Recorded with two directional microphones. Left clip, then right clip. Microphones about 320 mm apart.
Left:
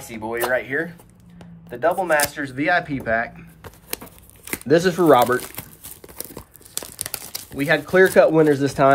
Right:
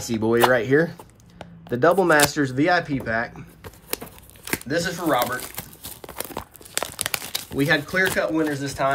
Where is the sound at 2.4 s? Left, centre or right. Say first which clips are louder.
Even; centre.